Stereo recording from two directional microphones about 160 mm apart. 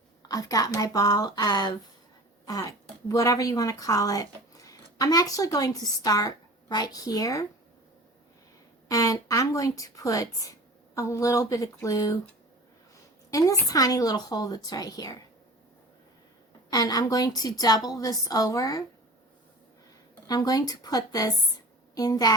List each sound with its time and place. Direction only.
0.2 s a woman's voice: 20° left (ahead or behind)
8.9 s a woman's voice: 20° left (ahead or behind)
13.3 s a woman's voice: 20° left (ahead or behind)
16.6 s a woman's voice: 25° left (ahead or behind)
20.2 s a woman's voice: 25° left (ahead or behind)